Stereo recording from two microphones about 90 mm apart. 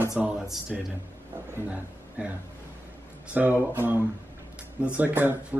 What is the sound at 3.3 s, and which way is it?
Speech, 15° right (ahead or behind).